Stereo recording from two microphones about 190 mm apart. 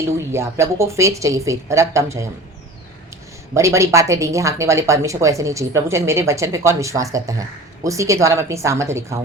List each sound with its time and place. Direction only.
0.1 s speech: 15° right (ahead or behind)
3.5 s speech: 15° right (ahead or behind)